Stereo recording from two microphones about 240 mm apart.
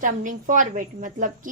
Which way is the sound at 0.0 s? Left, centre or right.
Right.